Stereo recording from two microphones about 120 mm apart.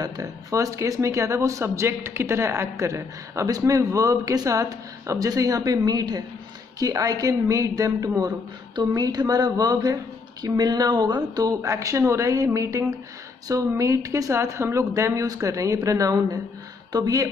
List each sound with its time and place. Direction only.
0.0 s speech: 30° right (ahead or behind)